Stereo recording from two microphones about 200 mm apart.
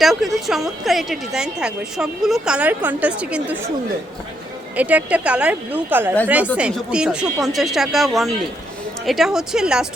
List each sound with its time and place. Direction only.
0.0 s a woman's voice: centre (ahead or behind)
4.8 s a woman's voice: 5° right (ahead or behind)